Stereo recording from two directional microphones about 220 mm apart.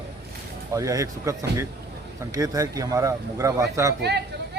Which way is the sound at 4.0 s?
50° right (ahead or behind).